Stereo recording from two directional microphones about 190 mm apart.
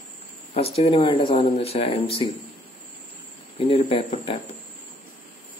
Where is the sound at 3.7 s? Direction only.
30° left (ahead or behind).